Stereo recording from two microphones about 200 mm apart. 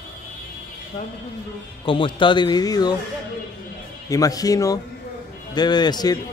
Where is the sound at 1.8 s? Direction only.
25° left (ahead or behind).